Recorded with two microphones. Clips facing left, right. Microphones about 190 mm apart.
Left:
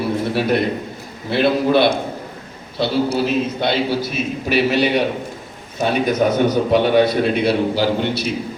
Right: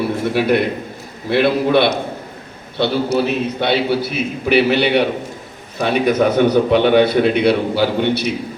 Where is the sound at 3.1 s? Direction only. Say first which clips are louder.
Right 1 dB; 60° right (ahead or behind).